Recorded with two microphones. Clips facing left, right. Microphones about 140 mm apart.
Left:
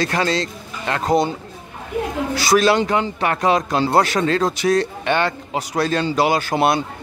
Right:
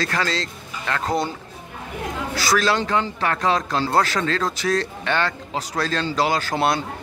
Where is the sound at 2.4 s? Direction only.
20° left (ahead or behind).